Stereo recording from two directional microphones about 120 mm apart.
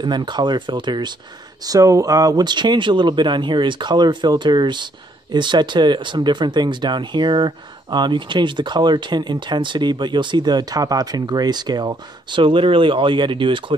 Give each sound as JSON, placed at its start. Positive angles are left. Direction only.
{"t": 0.0, "sound": "speech", "side_deg": -40}